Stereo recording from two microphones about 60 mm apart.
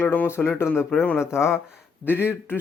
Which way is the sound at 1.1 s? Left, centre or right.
Left.